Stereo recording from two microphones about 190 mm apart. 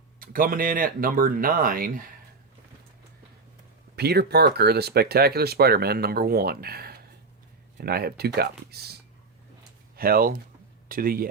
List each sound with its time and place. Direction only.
0.2 s speech: 50° right (ahead or behind)
3.9 s speech: 60° right (ahead or behind)